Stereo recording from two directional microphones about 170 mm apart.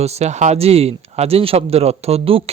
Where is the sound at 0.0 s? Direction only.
40° right (ahead or behind).